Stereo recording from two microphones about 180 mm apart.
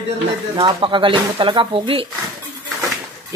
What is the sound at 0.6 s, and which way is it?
Speech, 25° right (ahead or behind).